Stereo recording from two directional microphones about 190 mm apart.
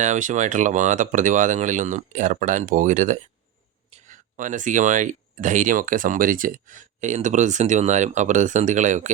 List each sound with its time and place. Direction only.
0.0 s speech: 40° right (ahead or behind)